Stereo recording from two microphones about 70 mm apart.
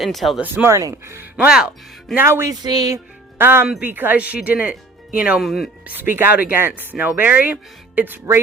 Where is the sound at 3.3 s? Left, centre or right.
Right.